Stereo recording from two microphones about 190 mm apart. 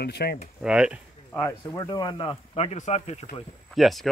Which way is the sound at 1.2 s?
10° left (ahead or behind).